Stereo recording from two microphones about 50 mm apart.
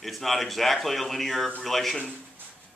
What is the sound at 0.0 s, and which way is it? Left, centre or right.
A man's voice, centre.